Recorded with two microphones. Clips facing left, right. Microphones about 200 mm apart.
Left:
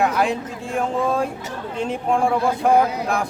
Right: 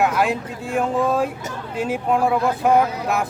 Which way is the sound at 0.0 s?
Centre (ahead or behind).